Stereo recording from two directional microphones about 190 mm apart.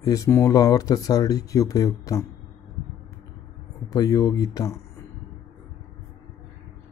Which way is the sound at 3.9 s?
20° left (ahead or behind).